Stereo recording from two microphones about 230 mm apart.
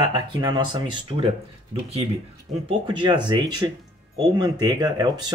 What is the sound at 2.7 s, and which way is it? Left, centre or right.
Speech, right.